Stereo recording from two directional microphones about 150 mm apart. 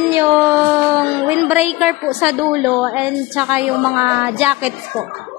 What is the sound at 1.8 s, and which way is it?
A woman's voice, 5° right (ahead or behind).